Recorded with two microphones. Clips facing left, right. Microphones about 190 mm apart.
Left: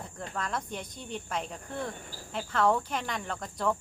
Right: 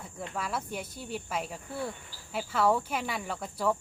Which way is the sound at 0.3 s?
5° right (ahead or behind).